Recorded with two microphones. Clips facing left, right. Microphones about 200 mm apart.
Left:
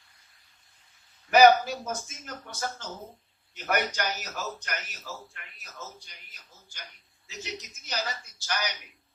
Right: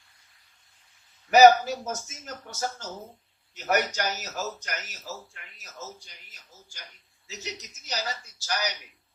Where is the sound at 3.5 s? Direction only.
45° right (ahead or behind).